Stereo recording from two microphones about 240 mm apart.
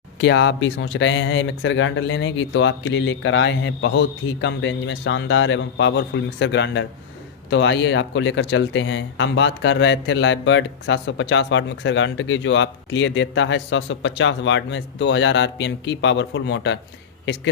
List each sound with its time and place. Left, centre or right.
0.2 s speech: left